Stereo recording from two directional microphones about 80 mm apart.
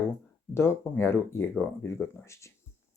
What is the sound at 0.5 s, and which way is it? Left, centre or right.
Speech, left.